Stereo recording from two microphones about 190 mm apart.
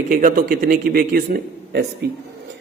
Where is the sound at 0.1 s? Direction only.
45° right (ahead or behind).